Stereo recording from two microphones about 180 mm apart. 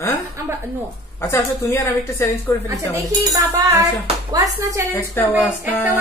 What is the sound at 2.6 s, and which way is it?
Speech, 15° right (ahead or behind).